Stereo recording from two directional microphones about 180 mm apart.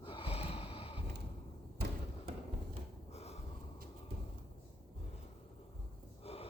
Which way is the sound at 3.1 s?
35° left (ahead or behind).